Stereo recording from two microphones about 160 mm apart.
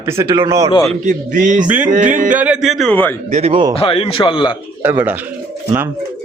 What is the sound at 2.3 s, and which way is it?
Speech, 5° right (ahead or behind).